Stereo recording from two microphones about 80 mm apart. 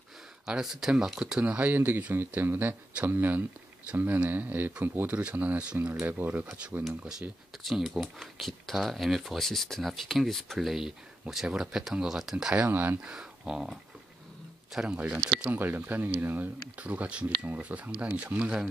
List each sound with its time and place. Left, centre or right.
0.5 s speech: centre
12.6 s speech: right
13.0 s speech: centre
15.5 s speech: right